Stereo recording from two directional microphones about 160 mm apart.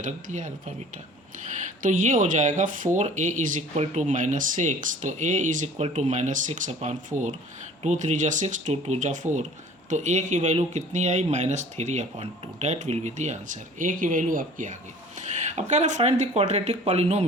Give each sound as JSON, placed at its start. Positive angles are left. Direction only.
{"t": 0.0, "sound": "speech", "side_deg": -50}
{"t": 1.8, "sound": "speech", "side_deg": -55}